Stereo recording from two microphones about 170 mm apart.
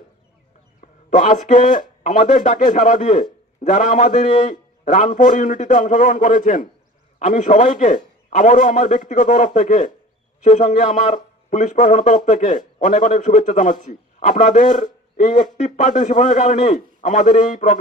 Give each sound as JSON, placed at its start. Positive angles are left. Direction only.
{"t": 0.7, "sound": "a man's voice", "side_deg": 50}